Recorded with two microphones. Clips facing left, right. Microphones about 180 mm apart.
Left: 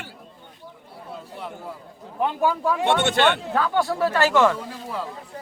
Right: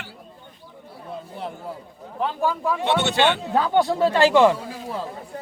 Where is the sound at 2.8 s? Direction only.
50° left (ahead or behind).